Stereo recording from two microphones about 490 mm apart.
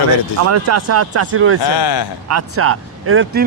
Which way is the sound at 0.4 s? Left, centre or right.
Right.